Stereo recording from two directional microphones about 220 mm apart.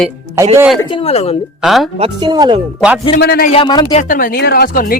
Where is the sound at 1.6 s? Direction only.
Centre (ahead or behind).